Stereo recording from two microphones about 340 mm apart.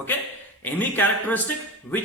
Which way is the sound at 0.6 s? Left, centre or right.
Centre.